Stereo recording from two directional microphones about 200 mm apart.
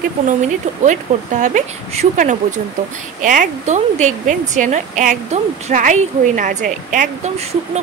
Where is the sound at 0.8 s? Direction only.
35° right (ahead or behind).